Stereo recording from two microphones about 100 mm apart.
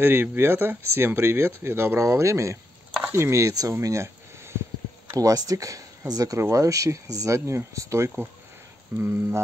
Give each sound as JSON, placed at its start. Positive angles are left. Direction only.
{"t": 0.0, "sound": "speech", "side_deg": -20}
{"t": 3.8, "sound": "a sound", "side_deg": -30}
{"t": 5.1, "sound": "speech", "side_deg": -35}